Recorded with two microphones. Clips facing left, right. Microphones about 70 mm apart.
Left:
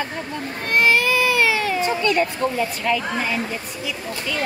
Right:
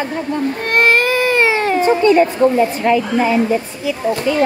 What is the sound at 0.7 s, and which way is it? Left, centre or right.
Baby cry, right.